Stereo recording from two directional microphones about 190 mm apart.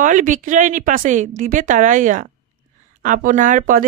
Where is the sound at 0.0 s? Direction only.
40° right (ahead or behind).